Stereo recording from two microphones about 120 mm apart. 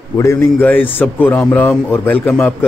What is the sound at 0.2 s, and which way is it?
Speech, 20° left (ahead or behind).